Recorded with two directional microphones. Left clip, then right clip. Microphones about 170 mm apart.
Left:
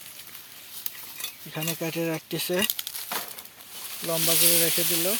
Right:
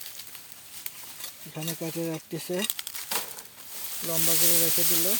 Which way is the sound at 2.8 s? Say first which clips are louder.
Left 2 dB; 25° left (ahead or behind).